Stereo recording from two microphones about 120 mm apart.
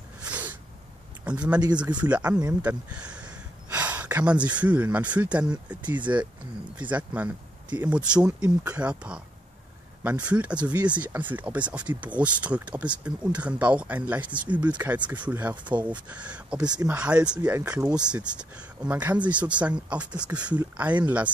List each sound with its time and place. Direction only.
1.2 s speech: 10° right (ahead or behind)
17.9 s speech: 10° right (ahead or behind)